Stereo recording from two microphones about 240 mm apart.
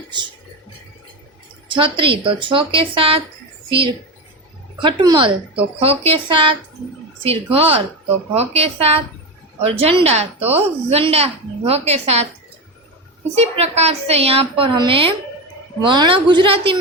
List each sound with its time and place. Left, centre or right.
1.6 s a woman's voice: right
4.8 s a woman's voice: centre
13.3 s a woman's voice: right